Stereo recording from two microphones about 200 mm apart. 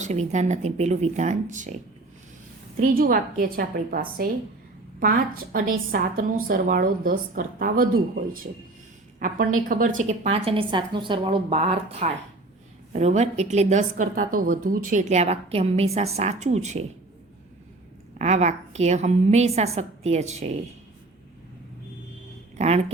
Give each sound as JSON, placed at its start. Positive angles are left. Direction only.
{"t": 0.0, "sound": "a woman's voice", "side_deg": -35}
{"t": 2.7, "sound": "a woman's voice", "side_deg": -45}
{"t": 10.0, "sound": "a woman's voice", "side_deg": -35}
{"t": 18.2, "sound": "a woman's voice", "side_deg": -35}
{"t": 22.5, "sound": "speech", "side_deg": -30}